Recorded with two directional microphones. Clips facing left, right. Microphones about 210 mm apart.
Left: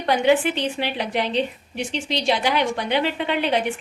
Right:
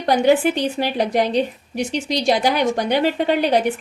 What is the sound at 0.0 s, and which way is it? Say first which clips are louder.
A woman's voice: right 3 dB; 40° right (ahead or behind).